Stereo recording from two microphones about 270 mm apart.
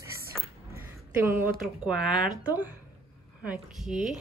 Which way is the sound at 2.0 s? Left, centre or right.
Centre.